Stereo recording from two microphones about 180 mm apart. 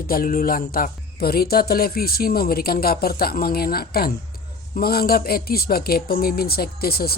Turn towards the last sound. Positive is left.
turn(degrees=60)  # may be behind; listen again after turning